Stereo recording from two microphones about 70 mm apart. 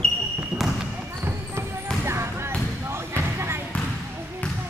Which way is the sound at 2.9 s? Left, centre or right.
Right.